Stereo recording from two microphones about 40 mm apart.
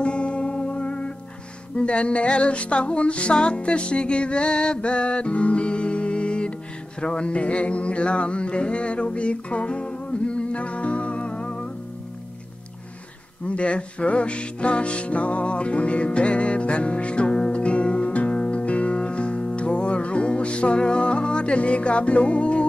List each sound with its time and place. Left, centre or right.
0.0 s music: left
13.5 s music: left